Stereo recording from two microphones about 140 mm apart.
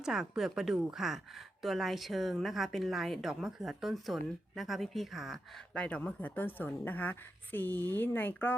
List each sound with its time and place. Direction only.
0.0 s a woman's voice: 5° right (ahead or behind); by 8.5 s 15° left (ahead or behind)